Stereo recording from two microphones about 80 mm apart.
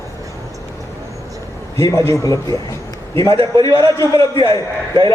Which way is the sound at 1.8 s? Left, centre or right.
Left.